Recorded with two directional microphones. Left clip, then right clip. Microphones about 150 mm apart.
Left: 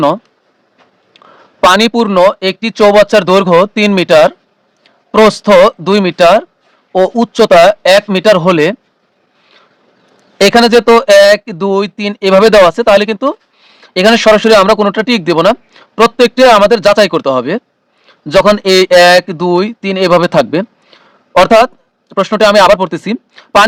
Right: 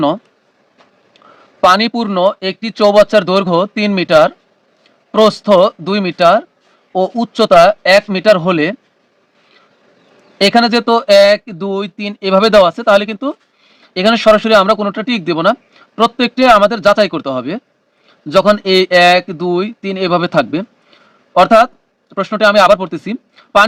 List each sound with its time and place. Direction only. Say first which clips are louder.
1.2 s a sound: left 4 dB; 55° left (ahead or behind)
1.6 s speech: left 3 dB; 55° left (ahead or behind)
10.3 s speech: left 5 dB; 55° left (ahead or behind)